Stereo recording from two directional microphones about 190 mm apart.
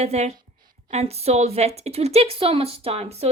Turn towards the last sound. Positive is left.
turn(degrees=-35)  # may be behind; listen again after turning